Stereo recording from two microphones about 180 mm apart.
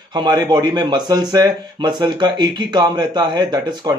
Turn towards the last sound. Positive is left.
turn(degrees=-25)  # may be behind; listen again after turning